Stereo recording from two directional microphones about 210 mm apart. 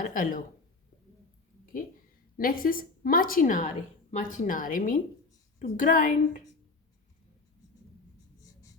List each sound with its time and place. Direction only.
0.0 s speech: 40° left (ahead or behind)
2.4 s a woman's voice: 45° left (ahead or behind)